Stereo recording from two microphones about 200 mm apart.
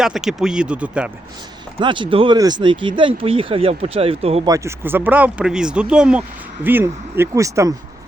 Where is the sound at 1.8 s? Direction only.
25° right (ahead or behind).